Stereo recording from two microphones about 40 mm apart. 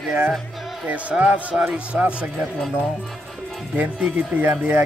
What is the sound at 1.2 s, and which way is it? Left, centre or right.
Speech, right.